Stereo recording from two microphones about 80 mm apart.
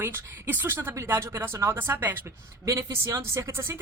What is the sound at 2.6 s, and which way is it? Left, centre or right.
Speech, right.